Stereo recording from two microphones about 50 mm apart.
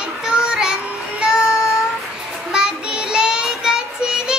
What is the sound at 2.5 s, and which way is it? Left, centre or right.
Child singing, centre.